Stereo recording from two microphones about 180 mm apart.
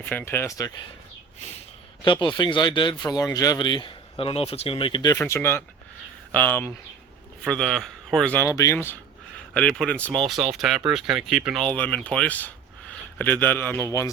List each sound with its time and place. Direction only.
0.0 s speech: 10° left (ahead or behind)
2.0 s speech: 25° left (ahead or behind)
5.1 s speech: 10° left (ahead or behind)